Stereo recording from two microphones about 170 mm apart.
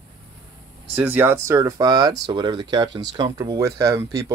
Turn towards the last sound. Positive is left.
turn(degrees=-20)  # may be behind; listen again after turning